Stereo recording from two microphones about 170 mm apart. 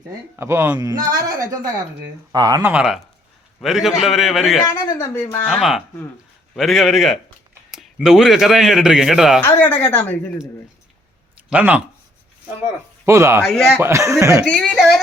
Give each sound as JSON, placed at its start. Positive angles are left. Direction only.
{"t": 0.3, "sound": "a man's voice", "side_deg": -15}
{"t": 2.7, "sound": "speech", "side_deg": -5}
{"t": 4.6, "sound": "a woman's voice", "side_deg": 20}
{"t": 5.5, "sound": "speech", "side_deg": 0}
{"t": 9.4, "sound": "speech", "side_deg": 15}
{"t": 11.4, "sound": "speech", "side_deg": -10}
{"t": 13.1, "sound": "speech", "side_deg": -15}
{"t": 13.4, "sound": "speech", "side_deg": 0}
{"t": 13.7, "sound": "speech", "side_deg": -15}
{"t": 14.4, "sound": "speech", "side_deg": 5}